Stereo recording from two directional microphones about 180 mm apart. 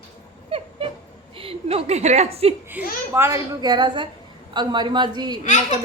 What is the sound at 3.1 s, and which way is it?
A woman's voice, 15° right (ahead or behind).